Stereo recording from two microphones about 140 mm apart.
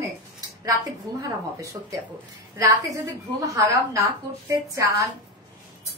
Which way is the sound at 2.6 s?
25° right (ahead or behind).